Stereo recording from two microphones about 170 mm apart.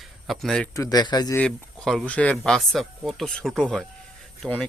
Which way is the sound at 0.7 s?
20° left (ahead or behind).